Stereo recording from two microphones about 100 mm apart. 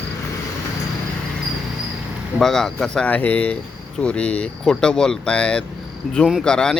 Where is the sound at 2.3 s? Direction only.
5° left (ahead or behind).